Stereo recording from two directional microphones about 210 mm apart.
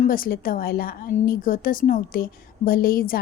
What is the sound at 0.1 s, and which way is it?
A woman's voice, 40° left (ahead or behind).